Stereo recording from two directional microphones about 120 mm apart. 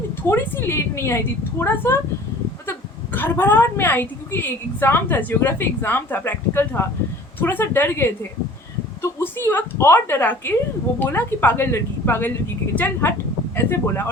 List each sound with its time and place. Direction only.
0.2 s a woman's voice: 20° left (ahead or behind)